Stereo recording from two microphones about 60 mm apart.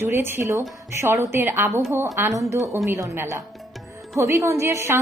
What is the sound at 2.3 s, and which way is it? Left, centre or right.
Speech, right.